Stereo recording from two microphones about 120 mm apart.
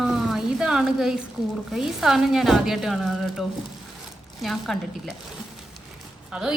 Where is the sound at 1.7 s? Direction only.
5° right (ahead or behind).